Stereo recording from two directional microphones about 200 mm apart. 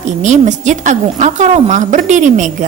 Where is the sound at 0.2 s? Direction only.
35° right (ahead or behind).